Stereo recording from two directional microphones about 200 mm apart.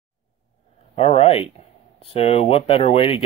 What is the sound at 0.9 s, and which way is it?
Speech, 30° left (ahead or behind).